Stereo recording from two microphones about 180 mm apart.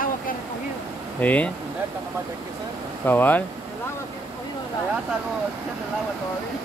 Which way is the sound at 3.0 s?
10° left (ahead or behind).